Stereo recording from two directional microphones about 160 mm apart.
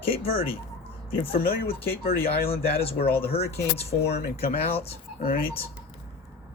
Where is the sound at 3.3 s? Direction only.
40° left (ahead or behind).